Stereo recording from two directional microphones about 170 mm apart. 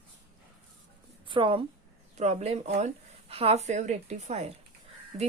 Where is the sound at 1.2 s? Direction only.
30° right (ahead or behind).